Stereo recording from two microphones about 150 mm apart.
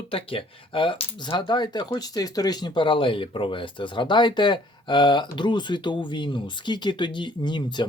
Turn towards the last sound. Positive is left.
turn(degrees=30)  # may be behind; listen again after turning